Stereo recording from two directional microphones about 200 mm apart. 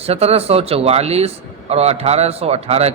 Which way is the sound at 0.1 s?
30° right (ahead or behind).